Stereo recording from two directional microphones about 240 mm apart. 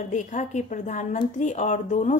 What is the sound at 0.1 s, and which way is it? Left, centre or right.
A woman's voice, left.